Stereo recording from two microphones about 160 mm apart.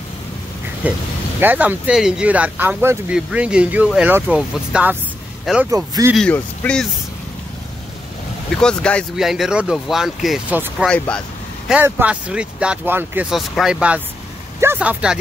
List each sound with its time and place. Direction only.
0.8 s speech: 10° right (ahead or behind)
5.7 s speech: 20° right (ahead or behind)
6.1 s speech: 5° left (ahead or behind)
8.5 s speech: 5° left (ahead or behind)
10.9 s vehicle: 5° left (ahead or behind)
11.7 s speech: 10° right (ahead or behind)